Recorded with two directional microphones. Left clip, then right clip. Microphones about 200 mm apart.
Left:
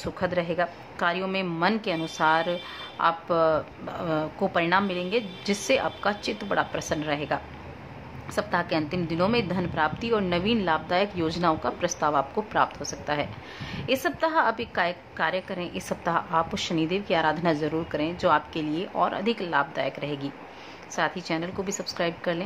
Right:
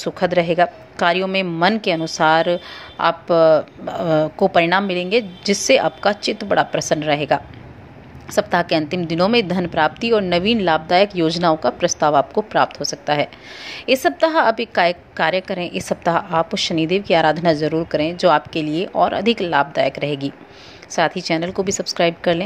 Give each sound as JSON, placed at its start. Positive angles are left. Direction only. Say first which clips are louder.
{"t": 0.0, "sound": "a woman's voice", "louder": "right 10 dB", "side_deg": -25}